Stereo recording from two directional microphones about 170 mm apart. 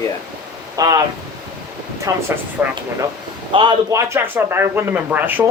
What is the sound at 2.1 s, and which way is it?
Speech, 20° right (ahead or behind).